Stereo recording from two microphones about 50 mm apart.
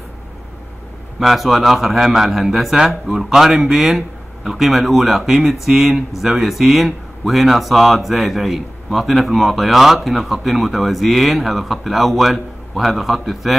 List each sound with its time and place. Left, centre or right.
1.2 s speech: centre